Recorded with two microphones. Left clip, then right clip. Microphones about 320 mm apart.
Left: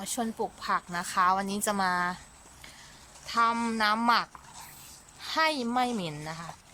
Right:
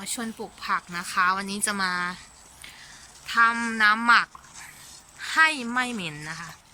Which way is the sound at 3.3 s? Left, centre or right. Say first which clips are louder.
Right 5 dB; centre.